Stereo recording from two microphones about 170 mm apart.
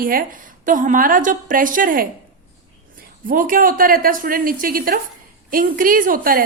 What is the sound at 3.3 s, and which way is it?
A woman's voice, 55° right (ahead or behind).